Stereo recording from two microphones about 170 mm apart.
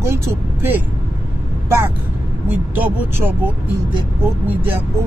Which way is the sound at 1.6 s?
15° right (ahead or behind).